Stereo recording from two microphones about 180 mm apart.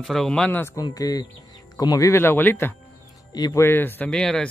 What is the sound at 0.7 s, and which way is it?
Speech, 20° left (ahead or behind).